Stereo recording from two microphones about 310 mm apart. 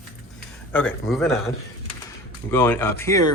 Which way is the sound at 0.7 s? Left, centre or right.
Centre.